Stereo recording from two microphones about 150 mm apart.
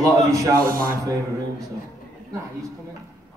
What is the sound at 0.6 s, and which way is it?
Speech, 70° right (ahead or behind).